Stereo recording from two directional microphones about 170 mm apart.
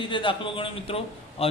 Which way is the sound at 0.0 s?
30° left (ahead or behind).